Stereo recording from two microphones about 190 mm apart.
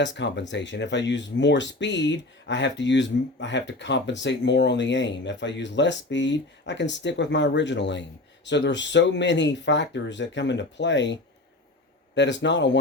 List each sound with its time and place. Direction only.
0.0 s speech: 70° left (ahead or behind)